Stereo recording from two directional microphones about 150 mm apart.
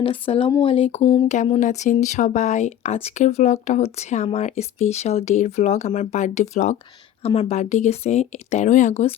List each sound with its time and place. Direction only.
0.0 s speech: 35° left (ahead or behind)
1.5 s speech: 55° left (ahead or behind)